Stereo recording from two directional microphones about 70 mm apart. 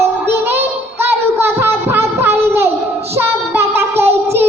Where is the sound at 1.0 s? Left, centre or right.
Right.